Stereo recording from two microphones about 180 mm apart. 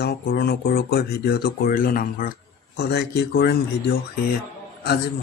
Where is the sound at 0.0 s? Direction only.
60° left (ahead or behind).